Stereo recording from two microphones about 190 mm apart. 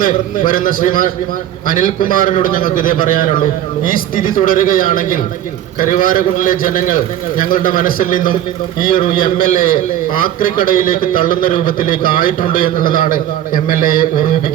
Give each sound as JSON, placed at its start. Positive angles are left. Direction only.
{"t": 0.0, "sound": "a man's voice", "side_deg": 45}